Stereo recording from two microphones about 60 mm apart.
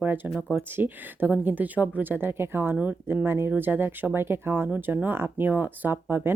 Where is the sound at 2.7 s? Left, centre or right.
Right.